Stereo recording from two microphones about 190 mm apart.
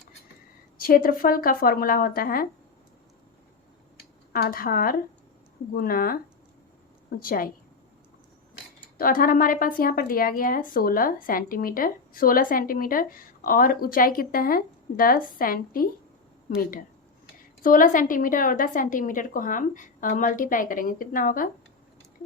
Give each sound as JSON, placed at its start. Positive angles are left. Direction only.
{"t": 0.8, "sound": "speech", "side_deg": 50}
{"t": 4.3, "sound": "speech", "side_deg": 50}
{"t": 7.2, "sound": "speech", "side_deg": 50}
{"t": 9.0, "sound": "speech", "side_deg": 50}
{"t": 17.6, "sound": "speech", "side_deg": 45}